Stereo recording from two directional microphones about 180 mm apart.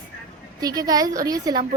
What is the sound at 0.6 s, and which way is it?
Speech, 20° right (ahead or behind).